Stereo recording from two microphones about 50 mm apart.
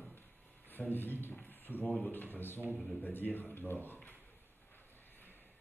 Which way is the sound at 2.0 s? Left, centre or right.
Left.